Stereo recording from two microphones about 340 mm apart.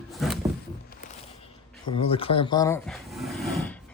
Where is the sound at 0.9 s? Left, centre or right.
Left; by 3.8 s centre.